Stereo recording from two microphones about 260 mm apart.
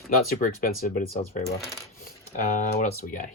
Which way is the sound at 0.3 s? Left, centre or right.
Left.